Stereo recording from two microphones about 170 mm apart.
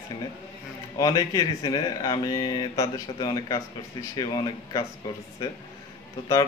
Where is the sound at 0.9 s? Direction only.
20° left (ahead or behind).